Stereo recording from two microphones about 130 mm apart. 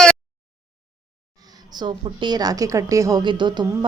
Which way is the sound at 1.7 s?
35° right (ahead or behind).